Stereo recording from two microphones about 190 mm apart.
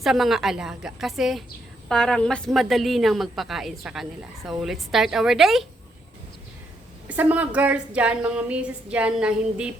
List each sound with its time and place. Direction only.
0.0 s a woman's voice: centre (ahead or behind)
7.1 s a woman's voice: 10° right (ahead or behind)